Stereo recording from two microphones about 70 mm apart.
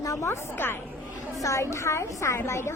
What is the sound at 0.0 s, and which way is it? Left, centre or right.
Speech, left.